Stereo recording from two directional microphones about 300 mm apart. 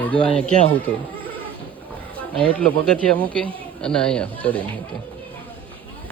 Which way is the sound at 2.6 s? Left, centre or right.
Centre.